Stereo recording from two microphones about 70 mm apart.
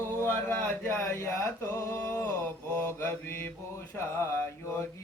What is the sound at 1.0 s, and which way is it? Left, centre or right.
Mantra, left.